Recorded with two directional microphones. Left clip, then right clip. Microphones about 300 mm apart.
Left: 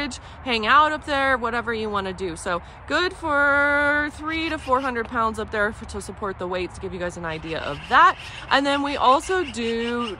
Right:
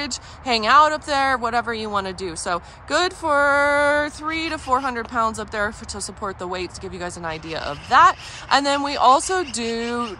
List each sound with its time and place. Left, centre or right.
0.0 s speech: centre